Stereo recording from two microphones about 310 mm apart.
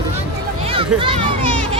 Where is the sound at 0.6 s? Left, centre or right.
Centre.